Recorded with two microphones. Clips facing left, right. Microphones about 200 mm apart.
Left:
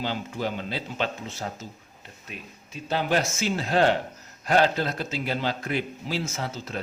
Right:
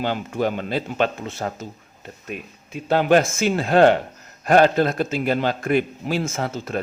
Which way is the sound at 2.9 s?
55° right (ahead or behind).